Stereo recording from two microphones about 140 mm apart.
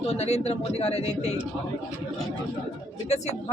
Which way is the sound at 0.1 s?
50° left (ahead or behind).